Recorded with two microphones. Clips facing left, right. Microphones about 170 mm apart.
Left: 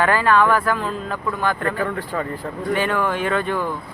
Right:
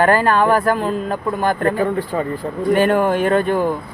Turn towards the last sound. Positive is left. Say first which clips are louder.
# right 6 dB
turn(degrees=-45)  # may be behind; listen again after turning